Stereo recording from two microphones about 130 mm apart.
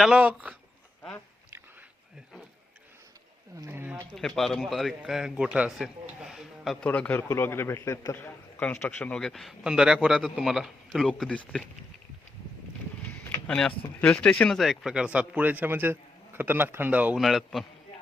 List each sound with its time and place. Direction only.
0.0 s speech: 5° right (ahead or behind)
3.5 s speech: 20° right (ahead or behind)
4.1 s a man's voice: centre (ahead or behind)
6.8 s a man's voice: 10° left (ahead or behind)
13.5 s speech: 10° left (ahead or behind); by 17.2 s 10° right (ahead or behind)
17.2 s a man's voice: centre (ahead or behind)